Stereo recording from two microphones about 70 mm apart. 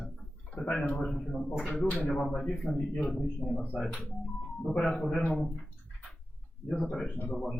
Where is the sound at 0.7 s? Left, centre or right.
Centre.